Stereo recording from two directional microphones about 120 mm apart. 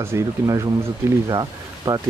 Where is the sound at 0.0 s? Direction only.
25° right (ahead or behind).